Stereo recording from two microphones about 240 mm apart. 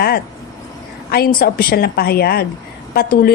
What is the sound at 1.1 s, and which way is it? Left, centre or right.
A woman's voice, left.